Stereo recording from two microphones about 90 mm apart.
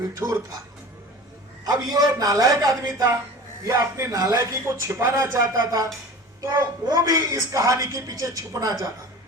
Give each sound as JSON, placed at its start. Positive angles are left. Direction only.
{"t": 0.1, "sound": "a man's voice", "side_deg": -35}
{"t": 1.6, "sound": "a man's voice", "side_deg": -45}